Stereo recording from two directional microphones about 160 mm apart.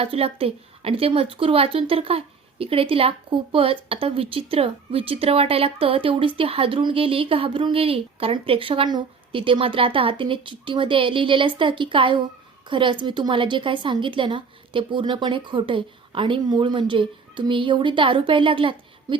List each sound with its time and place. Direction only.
0.0 s speech: 40° right (ahead or behind)